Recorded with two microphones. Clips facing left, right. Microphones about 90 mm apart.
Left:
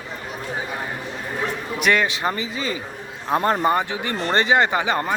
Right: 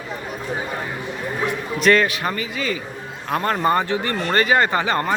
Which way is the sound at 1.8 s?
15° left (ahead or behind).